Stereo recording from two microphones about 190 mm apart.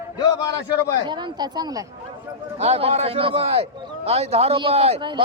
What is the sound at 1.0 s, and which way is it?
Speech, 25° right (ahead or behind).